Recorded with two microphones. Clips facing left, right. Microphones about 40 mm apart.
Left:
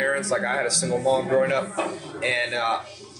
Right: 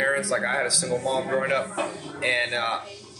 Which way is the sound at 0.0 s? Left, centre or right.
Centre.